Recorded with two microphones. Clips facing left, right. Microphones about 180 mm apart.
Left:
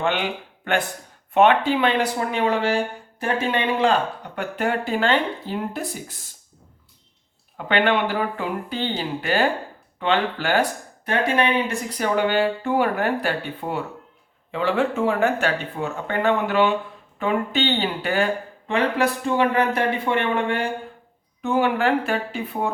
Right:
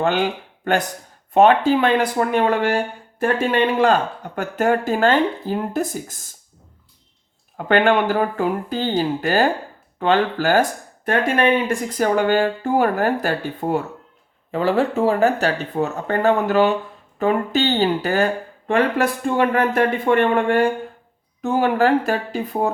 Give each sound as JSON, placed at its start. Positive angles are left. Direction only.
{"t": 0.0, "sound": "speech", "side_deg": -40}
{"t": 7.5, "sound": "speech", "side_deg": -45}